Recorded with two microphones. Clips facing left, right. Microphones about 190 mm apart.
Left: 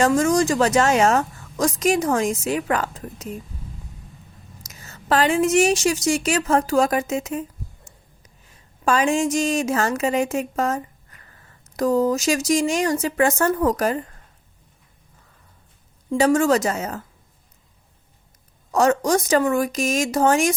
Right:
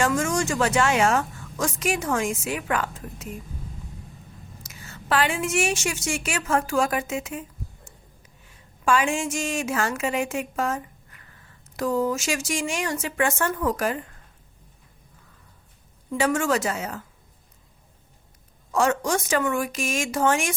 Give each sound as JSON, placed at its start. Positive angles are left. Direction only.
{"t": 0.0, "sound": "a woman's voice", "side_deg": 35}
{"t": 4.6, "sound": "a woman's voice", "side_deg": 40}
{"t": 8.4, "sound": "a woman's voice", "side_deg": 40}
{"t": 16.0, "sound": "a woman's voice", "side_deg": 35}
{"t": 18.7, "sound": "a woman's voice", "side_deg": 40}